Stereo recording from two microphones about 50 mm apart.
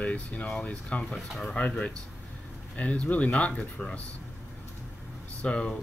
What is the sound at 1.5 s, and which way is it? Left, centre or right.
Speech, left.